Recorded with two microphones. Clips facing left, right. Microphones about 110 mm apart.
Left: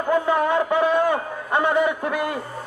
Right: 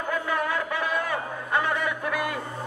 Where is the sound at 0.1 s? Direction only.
25° left (ahead or behind).